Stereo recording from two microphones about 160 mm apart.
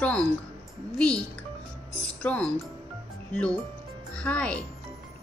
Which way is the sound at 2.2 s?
10° left (ahead or behind).